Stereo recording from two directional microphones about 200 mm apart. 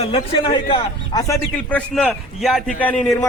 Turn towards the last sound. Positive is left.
turn(degrees=5)  # may be behind; listen again after turning